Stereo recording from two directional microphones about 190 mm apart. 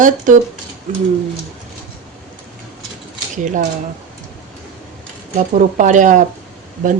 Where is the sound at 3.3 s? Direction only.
40° right (ahead or behind).